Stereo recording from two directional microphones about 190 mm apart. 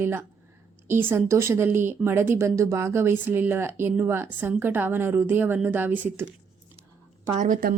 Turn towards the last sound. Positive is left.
turn(degrees=-45)  # may be behind; listen again after turning